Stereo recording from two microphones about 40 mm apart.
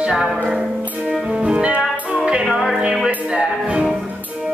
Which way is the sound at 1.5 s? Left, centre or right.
Right.